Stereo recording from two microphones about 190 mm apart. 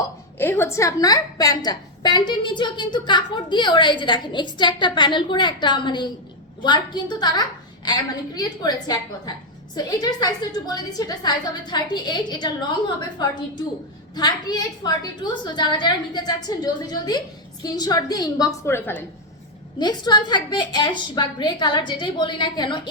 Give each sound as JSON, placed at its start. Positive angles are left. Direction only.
{"t": 0.3, "sound": "a woman's voice", "side_deg": 10}
{"t": 14.2, "sound": "a woman's voice", "side_deg": 20}
{"t": 19.8, "sound": "a woman's voice", "side_deg": 20}